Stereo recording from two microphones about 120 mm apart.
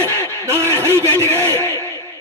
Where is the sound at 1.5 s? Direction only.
20° left (ahead or behind).